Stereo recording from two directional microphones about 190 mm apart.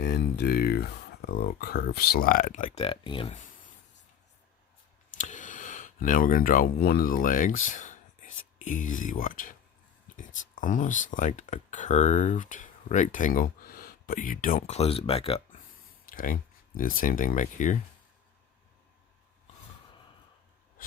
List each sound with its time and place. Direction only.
0.0 s speech: 60° left (ahead or behind); by 3.3 s 25° left (ahead or behind)
5.1 s speech: 40° left (ahead or behind)
16.0 s speech: 45° left (ahead or behind)